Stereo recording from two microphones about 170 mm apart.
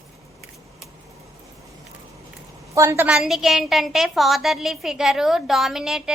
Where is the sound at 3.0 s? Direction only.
5° right (ahead or behind).